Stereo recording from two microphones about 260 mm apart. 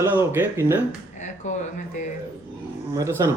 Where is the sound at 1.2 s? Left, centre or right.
Left.